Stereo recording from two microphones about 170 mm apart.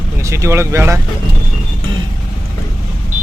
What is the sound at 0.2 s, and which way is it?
Speech, 20° right (ahead or behind).